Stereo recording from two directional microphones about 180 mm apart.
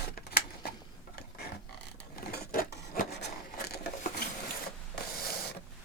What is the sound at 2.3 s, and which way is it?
Filing, 50° left (ahead or behind).